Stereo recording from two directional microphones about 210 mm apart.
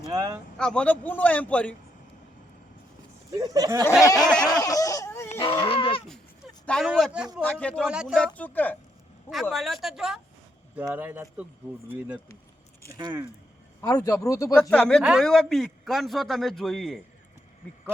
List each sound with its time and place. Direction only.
0.1 s speech: 15° right (ahead or behind)
0.6 s speech: 5° left (ahead or behind)
3.3 s speech: 15° right (ahead or behind)
4.0 s speech: 15° left (ahead or behind)
4.6 s laughter: 15° left (ahead or behind)
5.3 s goat: 25° left (ahead or behind)
6.7 s a man's voice: centre (ahead or behind)
8.4 s a man's voice: 10° left (ahead or behind)
12.9 s speech: 20° right (ahead or behind)
13.8 s speech: 15° left (ahead or behind)
14.6 s a man's voice: 5° left (ahead or behind)